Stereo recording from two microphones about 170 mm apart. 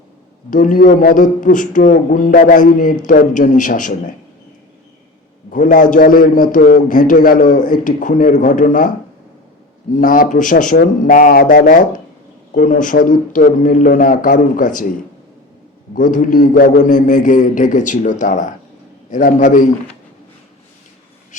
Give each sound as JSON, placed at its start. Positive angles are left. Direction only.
{"t": 0.5, "sound": "a man's voice", "side_deg": 50}
{"t": 5.5, "sound": "a man's voice", "side_deg": 50}
{"t": 10.0, "sound": "a man's voice", "side_deg": 55}
{"t": 16.0, "sound": "a man's voice", "side_deg": 50}